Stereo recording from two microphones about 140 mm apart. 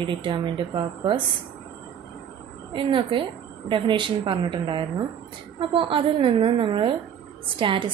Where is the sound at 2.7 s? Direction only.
35° right (ahead or behind).